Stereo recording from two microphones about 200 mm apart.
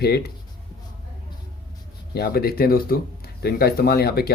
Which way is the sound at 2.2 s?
50° left (ahead or behind).